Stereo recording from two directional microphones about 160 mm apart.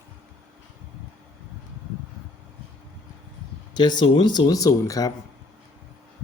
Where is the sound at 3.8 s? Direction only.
30° left (ahead or behind).